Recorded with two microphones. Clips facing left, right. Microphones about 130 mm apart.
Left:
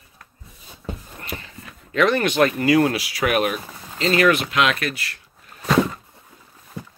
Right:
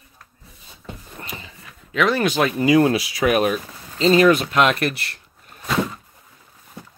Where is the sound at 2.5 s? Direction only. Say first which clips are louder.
Right 2 dB; 25° right (ahead or behind); by 4.9 s 40° right (ahead or behind).